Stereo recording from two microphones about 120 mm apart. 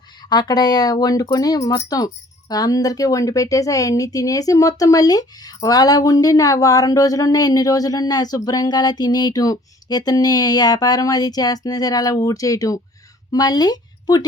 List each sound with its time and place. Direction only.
0.2 s speech: 35° left (ahead or behind)